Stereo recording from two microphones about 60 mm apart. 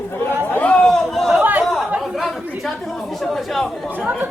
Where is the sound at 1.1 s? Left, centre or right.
Centre.